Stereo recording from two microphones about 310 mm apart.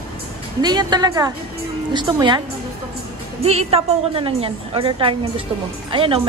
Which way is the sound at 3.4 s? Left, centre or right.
Centre.